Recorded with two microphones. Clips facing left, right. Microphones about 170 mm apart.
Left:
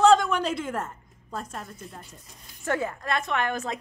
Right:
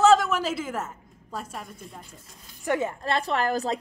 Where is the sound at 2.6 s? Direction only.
20° right (ahead or behind); by 3.7 s 35° right (ahead or behind).